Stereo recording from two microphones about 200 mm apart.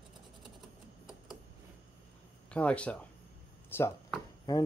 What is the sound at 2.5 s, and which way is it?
Speech, 5° left (ahead or behind).